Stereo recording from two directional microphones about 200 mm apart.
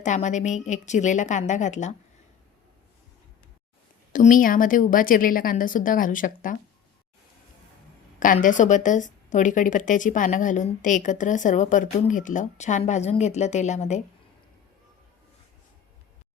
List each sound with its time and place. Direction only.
0.0 s a woman's voice: 35° left (ahead or behind)
4.1 s a woman's voice: 40° left (ahead or behind)
8.2 s a woman's voice: 40° left (ahead or behind)